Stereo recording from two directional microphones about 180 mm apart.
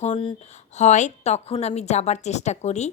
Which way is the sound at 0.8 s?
40° left (ahead or behind).